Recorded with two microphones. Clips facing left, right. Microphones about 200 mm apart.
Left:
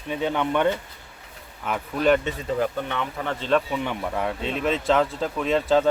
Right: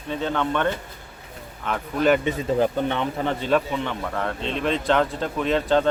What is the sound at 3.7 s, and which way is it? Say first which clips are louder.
Speech: even; 10° left (ahead or behind).